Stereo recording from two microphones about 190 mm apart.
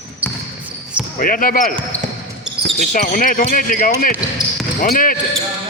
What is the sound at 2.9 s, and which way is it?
Speech, 45° left (ahead or behind).